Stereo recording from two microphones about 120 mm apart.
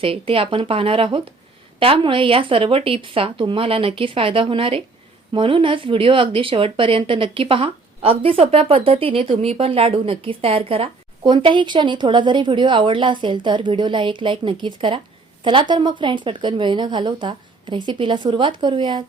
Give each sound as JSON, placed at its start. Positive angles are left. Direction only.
{"t": 0.0, "sound": "speech", "side_deg": -50}